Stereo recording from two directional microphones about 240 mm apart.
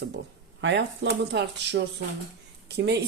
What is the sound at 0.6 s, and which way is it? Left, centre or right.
Speech, right.